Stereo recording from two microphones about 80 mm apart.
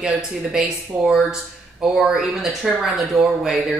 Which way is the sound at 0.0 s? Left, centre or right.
Centre.